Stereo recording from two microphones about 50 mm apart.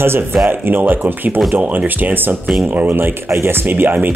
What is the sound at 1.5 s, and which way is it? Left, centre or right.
Speech, right.